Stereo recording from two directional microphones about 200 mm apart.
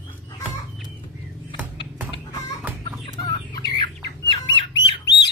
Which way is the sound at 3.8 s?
25° left (ahead or behind).